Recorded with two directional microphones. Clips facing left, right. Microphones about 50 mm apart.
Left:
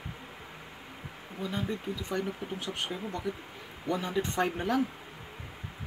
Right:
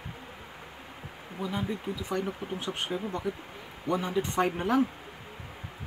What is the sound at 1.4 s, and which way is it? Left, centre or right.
Speech, centre.